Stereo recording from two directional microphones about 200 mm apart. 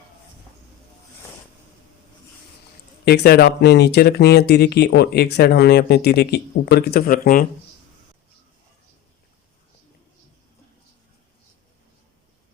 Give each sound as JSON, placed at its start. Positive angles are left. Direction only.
{"t": 3.0, "sound": "speech", "side_deg": 50}